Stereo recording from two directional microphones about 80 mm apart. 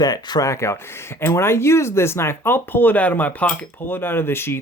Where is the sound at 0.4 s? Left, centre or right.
Left.